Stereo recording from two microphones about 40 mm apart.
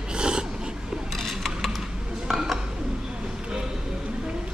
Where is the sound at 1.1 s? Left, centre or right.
Centre.